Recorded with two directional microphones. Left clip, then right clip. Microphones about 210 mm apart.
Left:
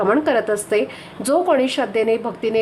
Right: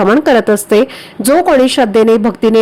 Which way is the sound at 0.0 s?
35° right (ahead or behind).